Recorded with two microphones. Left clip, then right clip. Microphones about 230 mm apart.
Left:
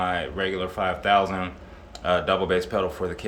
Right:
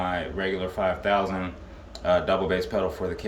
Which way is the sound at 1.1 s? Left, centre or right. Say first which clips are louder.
Left 4 dB; centre.